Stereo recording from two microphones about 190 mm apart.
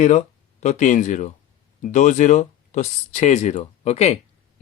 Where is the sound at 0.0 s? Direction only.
40° left (ahead or behind).